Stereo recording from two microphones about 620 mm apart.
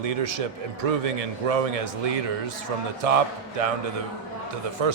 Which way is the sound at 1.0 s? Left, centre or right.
Right.